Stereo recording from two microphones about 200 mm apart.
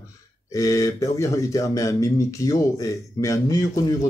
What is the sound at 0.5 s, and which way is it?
Speech, 15° left (ahead or behind).